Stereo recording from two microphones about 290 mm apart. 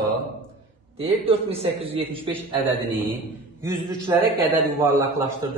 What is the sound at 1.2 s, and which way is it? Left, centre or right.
Speech, centre.